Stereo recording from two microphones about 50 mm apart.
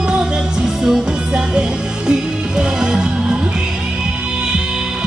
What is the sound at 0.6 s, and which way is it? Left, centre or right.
Music, centre.